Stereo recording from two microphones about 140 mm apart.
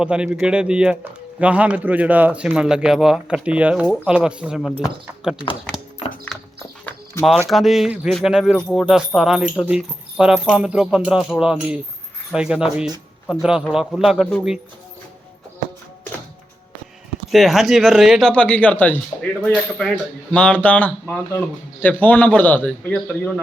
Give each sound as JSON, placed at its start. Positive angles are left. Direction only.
{"t": 0.0, "sound": "speech", "side_deg": -5}
{"t": 6.8, "sound": "a sound", "side_deg": 15}
{"t": 7.4, "sound": "speech", "side_deg": 0}
{"t": 17.3, "sound": "speech", "side_deg": 0}